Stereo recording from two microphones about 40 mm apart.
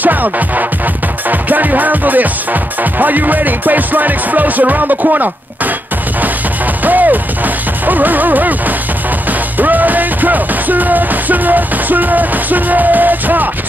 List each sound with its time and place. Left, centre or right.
0.0 s music: right
6.8 s music: right